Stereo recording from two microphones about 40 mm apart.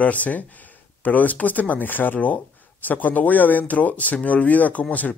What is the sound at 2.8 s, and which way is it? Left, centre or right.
Speech, left.